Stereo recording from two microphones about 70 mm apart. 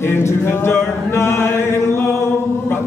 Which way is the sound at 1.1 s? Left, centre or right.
Left.